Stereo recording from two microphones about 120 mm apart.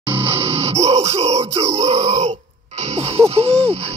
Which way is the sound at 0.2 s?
55° right (ahead or behind).